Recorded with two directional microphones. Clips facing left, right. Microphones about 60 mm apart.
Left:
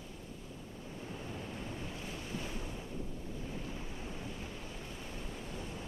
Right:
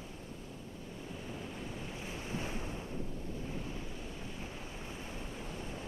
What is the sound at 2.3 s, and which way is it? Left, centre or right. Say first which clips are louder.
Waves: right 3 dB; right.